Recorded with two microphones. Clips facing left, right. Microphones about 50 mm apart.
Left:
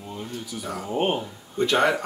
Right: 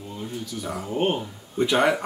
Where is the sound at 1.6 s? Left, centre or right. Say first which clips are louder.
Even; centre.